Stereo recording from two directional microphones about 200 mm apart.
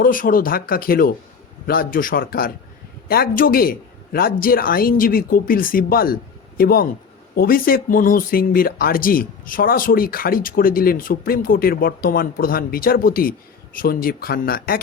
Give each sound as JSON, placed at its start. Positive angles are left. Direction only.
{"t": 0.0, "sound": "speech", "side_deg": 45}